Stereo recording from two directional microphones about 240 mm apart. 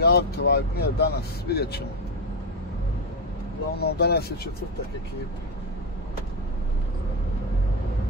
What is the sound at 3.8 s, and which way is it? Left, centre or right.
Speech, left.